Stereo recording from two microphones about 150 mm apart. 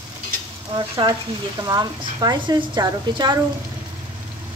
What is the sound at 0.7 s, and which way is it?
Speech, 30° right (ahead or behind).